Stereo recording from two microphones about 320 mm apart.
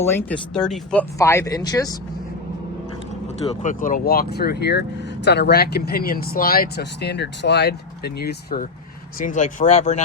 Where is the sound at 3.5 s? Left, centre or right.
Left.